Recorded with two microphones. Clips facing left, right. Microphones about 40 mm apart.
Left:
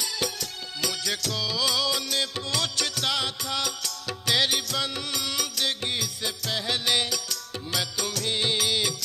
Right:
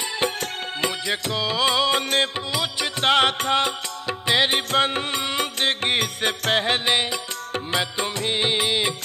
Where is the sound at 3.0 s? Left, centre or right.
Right.